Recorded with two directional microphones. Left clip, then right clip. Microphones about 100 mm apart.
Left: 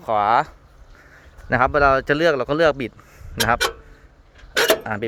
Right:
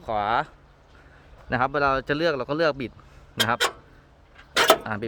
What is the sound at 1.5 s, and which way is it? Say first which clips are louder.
Speech: left 6 dB; 30° left (ahead or behind).